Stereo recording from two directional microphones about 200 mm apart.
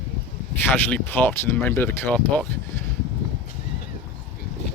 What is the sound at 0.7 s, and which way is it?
Speech, 10° left (ahead or behind).